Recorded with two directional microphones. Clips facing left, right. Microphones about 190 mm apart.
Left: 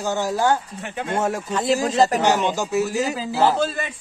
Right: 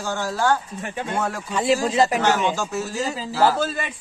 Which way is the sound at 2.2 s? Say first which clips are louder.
Left 1 dB; 15° left (ahead or behind).